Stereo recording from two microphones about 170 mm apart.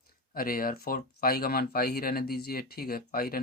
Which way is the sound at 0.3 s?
60° left (ahead or behind).